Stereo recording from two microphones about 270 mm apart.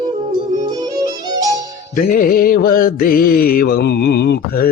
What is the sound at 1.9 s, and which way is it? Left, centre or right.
Music, left.